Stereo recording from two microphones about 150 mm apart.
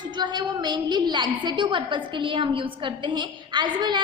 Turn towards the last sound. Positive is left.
turn(degrees=-30)  # may be behind; listen again after turning